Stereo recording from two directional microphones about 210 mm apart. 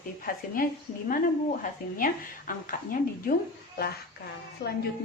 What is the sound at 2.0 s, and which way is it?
A woman's voice, 40° left (ahead or behind).